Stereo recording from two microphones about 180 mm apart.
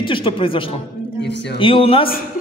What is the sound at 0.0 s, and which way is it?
A man's voice, 30° left (ahead or behind).